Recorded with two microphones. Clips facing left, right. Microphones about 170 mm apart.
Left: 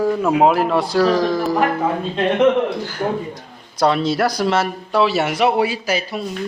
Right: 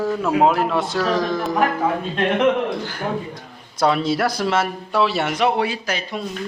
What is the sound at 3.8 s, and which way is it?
A man's voice, centre (ahead or behind).